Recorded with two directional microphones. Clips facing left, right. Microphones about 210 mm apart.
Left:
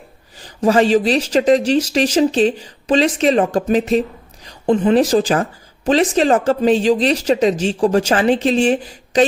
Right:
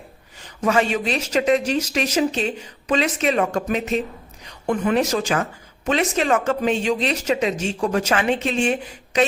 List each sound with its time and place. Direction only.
0.3 s speech: 35° left (ahead or behind)